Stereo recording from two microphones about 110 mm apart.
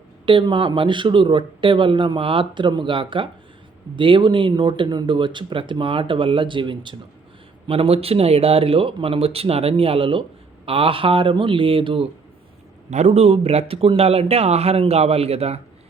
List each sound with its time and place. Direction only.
0.3 s speech: 50° right (ahead or behind)
7.7 s speech: 60° right (ahead or behind)
12.9 s speech: 90° right; by 15.6 s 70° right (ahead or behind)